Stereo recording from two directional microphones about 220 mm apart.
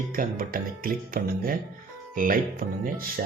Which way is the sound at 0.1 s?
40° right (ahead or behind).